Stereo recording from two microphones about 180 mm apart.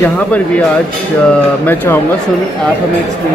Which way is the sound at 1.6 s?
10° left (ahead or behind).